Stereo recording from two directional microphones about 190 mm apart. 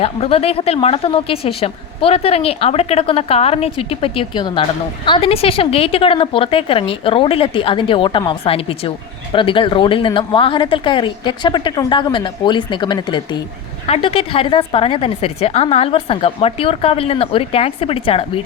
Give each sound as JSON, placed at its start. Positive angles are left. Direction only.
{"t": 0.0, "sound": "a woman's voice", "side_deg": 30}